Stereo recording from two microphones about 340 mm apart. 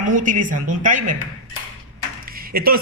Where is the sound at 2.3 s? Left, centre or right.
Right.